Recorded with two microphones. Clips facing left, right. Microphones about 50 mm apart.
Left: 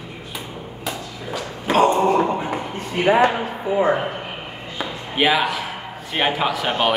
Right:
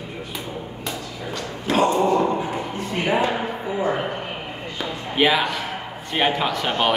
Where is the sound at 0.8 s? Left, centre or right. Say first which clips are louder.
Left 3 dB; centre.